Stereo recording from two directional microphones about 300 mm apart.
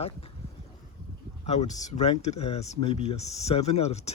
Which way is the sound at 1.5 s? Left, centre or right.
Left.